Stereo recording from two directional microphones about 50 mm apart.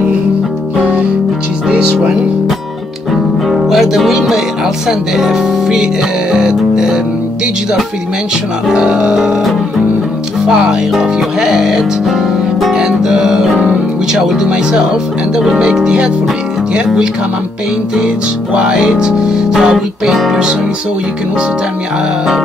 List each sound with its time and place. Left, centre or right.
3.4 s music: centre
8.6 s music: centre
10.4 s music: centre